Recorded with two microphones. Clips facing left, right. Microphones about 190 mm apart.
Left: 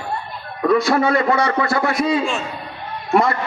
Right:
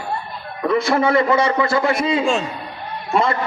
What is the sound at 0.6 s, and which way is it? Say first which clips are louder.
A man's voice: left 1 dB; 25° right (ahead or behind).